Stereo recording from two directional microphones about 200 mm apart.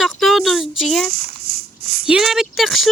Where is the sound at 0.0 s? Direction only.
Centre (ahead or behind).